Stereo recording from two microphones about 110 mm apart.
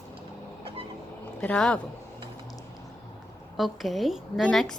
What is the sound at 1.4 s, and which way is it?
Speech, 10° left (ahead or behind).